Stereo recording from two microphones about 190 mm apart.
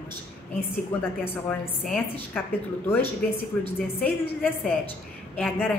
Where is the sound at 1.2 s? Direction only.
5° left (ahead or behind).